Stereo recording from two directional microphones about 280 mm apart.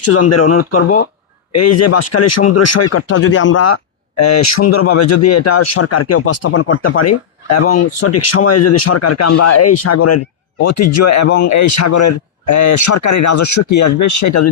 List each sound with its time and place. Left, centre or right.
0.0 s speech: left
4.2 s speech: left